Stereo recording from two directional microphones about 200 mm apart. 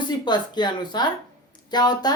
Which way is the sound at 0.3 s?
20° left (ahead or behind).